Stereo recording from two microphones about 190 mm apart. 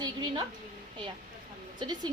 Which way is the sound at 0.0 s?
20° right (ahead or behind).